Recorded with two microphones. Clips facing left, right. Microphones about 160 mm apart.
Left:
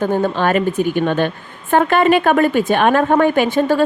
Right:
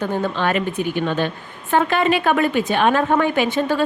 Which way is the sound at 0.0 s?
45° left (ahead or behind).